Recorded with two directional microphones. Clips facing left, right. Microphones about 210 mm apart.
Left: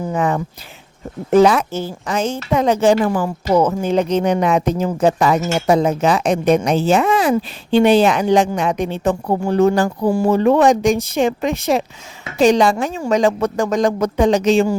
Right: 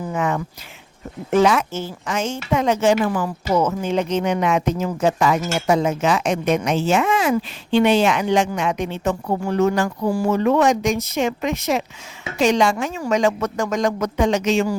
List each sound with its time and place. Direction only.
0.1 s speech: 35° left (ahead or behind)